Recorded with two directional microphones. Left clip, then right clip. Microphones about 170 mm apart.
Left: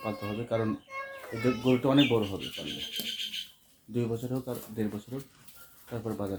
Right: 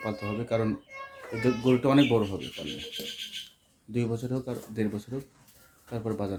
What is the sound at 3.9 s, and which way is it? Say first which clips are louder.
Speech: right 1 dB; 15° right (ahead or behind).